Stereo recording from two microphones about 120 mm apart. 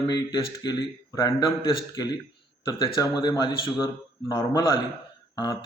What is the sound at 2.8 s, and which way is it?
Speech, 30° left (ahead or behind).